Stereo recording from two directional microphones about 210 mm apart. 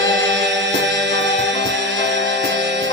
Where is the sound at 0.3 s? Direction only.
55° right (ahead or behind).